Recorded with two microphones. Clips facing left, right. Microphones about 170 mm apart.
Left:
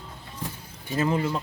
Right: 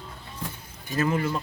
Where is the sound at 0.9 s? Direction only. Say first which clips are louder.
Even; 25° left (ahead or behind).